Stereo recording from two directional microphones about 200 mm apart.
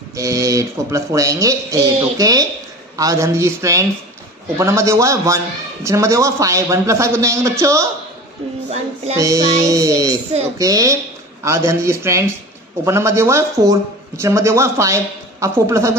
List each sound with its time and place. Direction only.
0.1 s speech: 15° right (ahead or behind)
8.6 s music: 35° right (ahead or behind)
9.2 s speech: 15° right (ahead or behind)